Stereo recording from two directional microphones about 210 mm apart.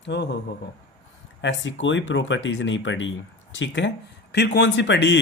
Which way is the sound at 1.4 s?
60° left (ahead or behind).